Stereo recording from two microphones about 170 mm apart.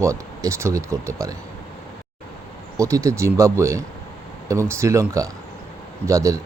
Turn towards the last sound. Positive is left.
turn(degrees=-20)  # may be behind; listen again after turning